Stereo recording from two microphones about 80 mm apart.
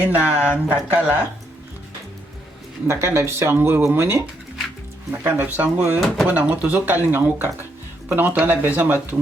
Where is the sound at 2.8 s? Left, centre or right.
Right.